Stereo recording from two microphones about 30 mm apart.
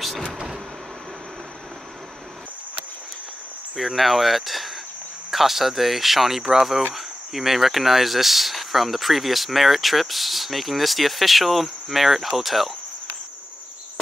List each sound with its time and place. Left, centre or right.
3.7 s speech: centre